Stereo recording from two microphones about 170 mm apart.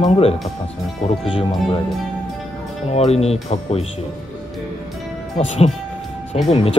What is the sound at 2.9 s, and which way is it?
Speech, 40° left (ahead or behind).